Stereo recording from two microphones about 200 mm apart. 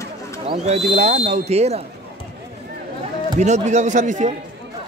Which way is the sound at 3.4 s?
35° right (ahead or behind).